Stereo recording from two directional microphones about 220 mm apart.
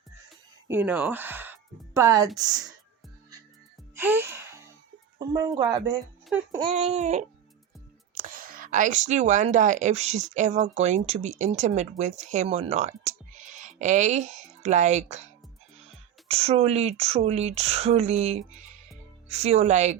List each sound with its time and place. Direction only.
0.7 s speech: 10° right (ahead or behind)
3.9 s music: 10° right (ahead or behind)
5.2 s speech: 15° right (ahead or behind); by 15.3 s 30° right (ahead or behind)
16.3 s speech: 25° right (ahead or behind)